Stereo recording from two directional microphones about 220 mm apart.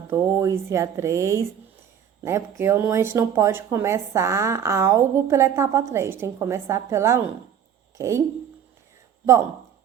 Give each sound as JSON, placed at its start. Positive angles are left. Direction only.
{"t": 0.1, "sound": "speech", "side_deg": -10}